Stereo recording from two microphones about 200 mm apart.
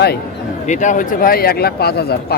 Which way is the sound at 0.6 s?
40° left (ahead or behind).